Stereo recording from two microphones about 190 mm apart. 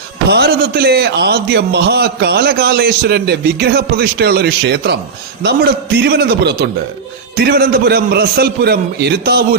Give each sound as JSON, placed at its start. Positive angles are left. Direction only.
{"t": 0.3, "sound": "a man's voice", "side_deg": -60}